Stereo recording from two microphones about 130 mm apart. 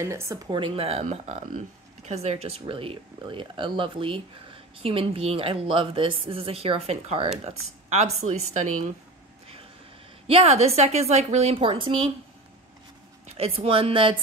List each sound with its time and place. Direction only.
0.0 s speech: 20° right (ahead or behind)
0.5 s speech: 45° right (ahead or behind)
1.1 s speech: 60° right (ahead or behind)
10.2 s speech: 50° right (ahead or behind)
13.4 s speech: 50° right (ahead or behind)